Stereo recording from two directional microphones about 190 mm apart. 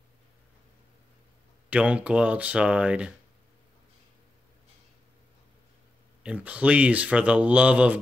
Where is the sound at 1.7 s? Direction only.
5° right (ahead or behind).